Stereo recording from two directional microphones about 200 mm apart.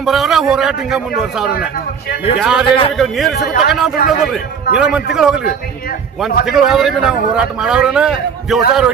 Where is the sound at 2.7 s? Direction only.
25° left (ahead or behind).